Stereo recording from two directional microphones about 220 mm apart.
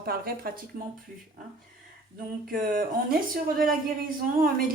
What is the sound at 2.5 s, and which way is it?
A woman's voice, 40° right (ahead or behind).